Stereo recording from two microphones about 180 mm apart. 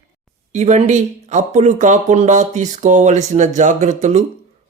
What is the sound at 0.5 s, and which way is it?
Speech, 35° right (ahead or behind).